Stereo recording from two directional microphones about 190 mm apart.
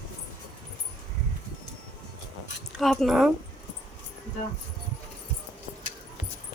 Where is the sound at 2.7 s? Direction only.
Centre (ahead or behind).